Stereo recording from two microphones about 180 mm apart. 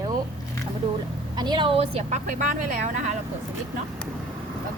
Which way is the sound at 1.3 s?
25° right (ahead or behind).